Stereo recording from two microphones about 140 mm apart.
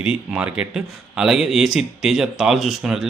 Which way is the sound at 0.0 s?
5° right (ahead or behind).